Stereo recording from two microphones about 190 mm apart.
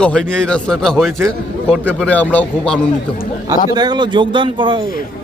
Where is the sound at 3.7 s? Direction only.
25° right (ahead or behind).